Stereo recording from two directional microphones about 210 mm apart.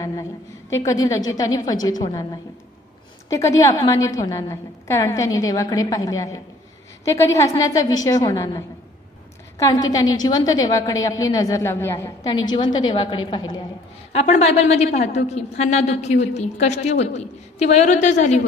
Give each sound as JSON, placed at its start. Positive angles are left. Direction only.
{"t": 0.0, "sound": "a sound", "side_deg": 15}
{"t": 0.7, "sound": "a woman's voice", "side_deg": 15}
{"t": 3.3, "sound": "a woman's voice", "side_deg": 15}
{"t": 14.1, "sound": "a woman's voice", "side_deg": 30}